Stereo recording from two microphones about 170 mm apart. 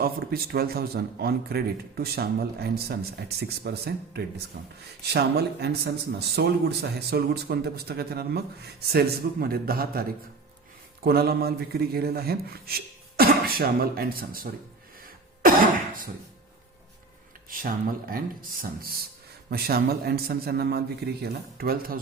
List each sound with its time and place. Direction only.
0.0 s a man's voice: 60° right (ahead or behind)
15.4 s cough: 55° right (ahead or behind)
17.5 s a man's voice: 55° right (ahead or behind)